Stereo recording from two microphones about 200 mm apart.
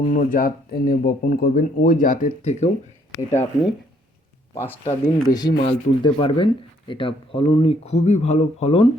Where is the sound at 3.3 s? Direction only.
15° left (ahead or behind); by 8.8 s 30° left (ahead or behind).